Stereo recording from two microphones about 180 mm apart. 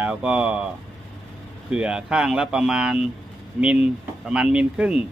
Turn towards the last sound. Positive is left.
turn(degrees=-5)  # may be behind; listen again after turning